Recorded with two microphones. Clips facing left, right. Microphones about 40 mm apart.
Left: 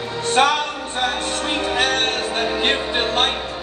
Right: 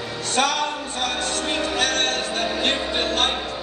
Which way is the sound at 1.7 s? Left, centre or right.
Left.